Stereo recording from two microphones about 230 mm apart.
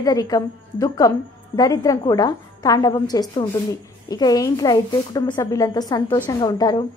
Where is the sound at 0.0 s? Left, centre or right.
Centre.